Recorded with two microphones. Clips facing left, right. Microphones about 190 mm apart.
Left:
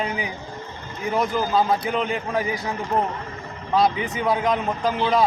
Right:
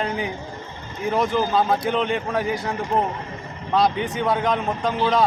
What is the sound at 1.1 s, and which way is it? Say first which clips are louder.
A man's voice: right 1 dB; centre (ahead or behind).